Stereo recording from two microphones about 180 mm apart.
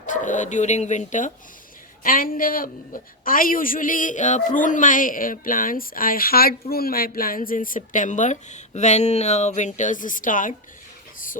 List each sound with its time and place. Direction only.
0.0 s a woman's voice: 45° left (ahead or behind)